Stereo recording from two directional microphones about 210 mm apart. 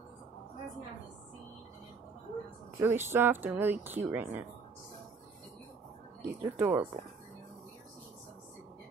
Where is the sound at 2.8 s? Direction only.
10° right (ahead or behind).